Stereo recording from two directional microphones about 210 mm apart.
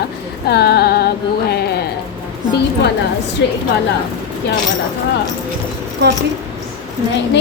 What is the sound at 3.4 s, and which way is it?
Speech, 55° left (ahead or behind).